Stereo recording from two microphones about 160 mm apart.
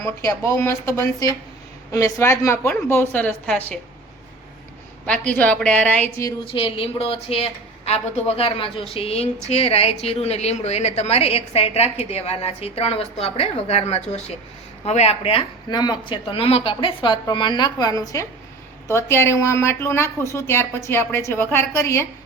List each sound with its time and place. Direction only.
0.0 s speech: 20° left (ahead or behind)
5.0 s speech: 5° left (ahead or behind)
6.4 s a woman's voice: 35° left (ahead or behind); by 22.0 s 15° left (ahead or behind)